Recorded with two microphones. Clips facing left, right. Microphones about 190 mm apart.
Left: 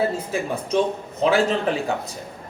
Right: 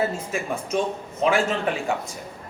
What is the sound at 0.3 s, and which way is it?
Speech, 35° left (ahead or behind).